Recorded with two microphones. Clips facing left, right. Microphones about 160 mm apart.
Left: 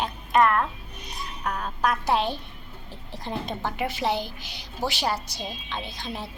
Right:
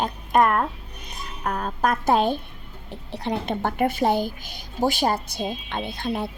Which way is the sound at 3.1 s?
65° right (ahead or behind).